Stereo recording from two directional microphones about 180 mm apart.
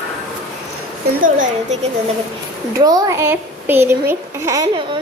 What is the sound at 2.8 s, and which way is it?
Speech, 20° right (ahead or behind).